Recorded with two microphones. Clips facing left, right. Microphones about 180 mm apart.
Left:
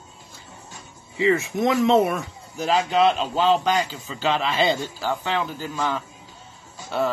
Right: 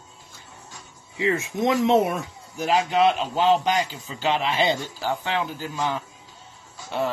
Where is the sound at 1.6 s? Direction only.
20° right (ahead or behind).